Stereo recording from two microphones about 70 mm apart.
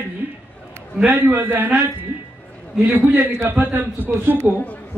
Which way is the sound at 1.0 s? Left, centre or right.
Right.